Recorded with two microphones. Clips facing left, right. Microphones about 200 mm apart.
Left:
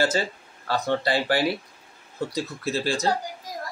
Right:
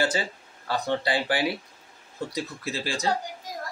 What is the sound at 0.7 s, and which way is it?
Speech, 15° right (ahead or behind).